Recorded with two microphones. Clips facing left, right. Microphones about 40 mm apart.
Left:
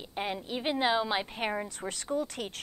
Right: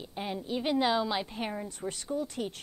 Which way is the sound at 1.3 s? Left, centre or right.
Left.